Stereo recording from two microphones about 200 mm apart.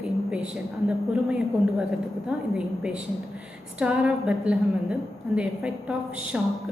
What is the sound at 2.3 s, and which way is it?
A woman's voice, 5° right (ahead or behind).